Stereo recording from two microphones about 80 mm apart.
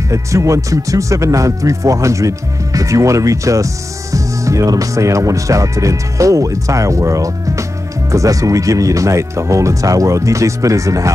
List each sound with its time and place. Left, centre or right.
0.1 s speech: right